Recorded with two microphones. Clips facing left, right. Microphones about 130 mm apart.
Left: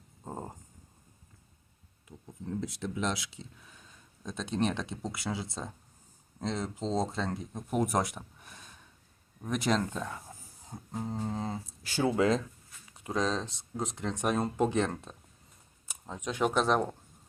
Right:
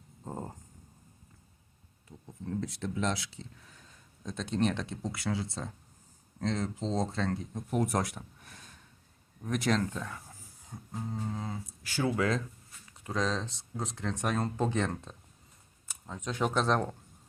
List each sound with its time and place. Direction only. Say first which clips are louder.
0.3 s dog: right 1 dB; 15° left (ahead or behind)
2.6 s speech: even; 15° left (ahead or behind)